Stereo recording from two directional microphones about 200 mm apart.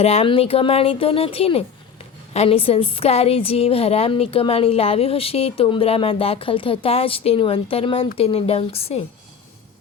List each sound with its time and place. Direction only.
0.0 s a woman's voice: 30° left (ahead or behind)